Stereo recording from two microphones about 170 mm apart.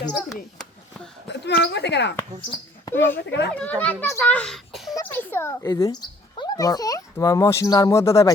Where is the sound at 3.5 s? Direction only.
10° left (ahead or behind).